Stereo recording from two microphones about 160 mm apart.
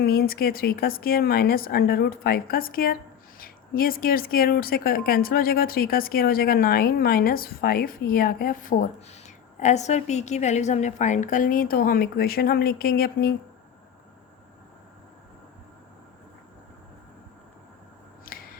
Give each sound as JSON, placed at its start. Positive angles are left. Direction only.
{"t": 0.0, "sound": "a woman's voice", "side_deg": 70}